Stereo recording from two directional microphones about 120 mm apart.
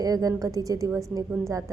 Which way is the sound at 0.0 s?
30° right (ahead or behind).